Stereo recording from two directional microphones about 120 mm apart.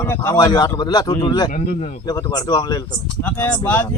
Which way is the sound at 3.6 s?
15° left (ahead or behind).